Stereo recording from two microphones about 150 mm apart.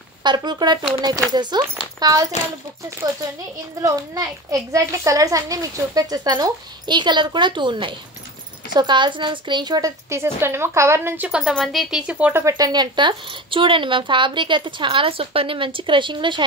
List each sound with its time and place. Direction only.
0.2 s a child's voice: 30° right (ahead or behind)